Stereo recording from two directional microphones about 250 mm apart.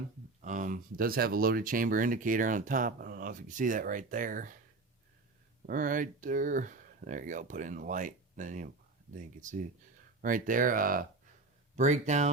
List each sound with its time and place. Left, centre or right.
0.4 s speech: right
5.6 s speech: right
10.2 s speech: right